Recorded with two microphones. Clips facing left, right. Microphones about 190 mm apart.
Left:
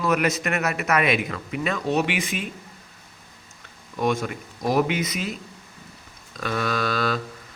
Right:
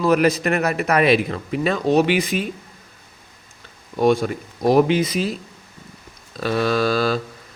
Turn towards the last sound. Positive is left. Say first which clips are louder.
# right 6 dB
turn(degrees=-30)  # may be behind; listen again after turning